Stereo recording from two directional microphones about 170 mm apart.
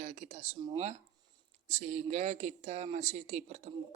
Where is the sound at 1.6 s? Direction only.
40° right (ahead or behind).